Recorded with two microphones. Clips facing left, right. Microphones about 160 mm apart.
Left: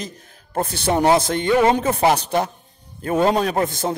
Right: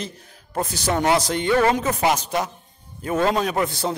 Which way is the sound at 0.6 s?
55° left (ahead or behind).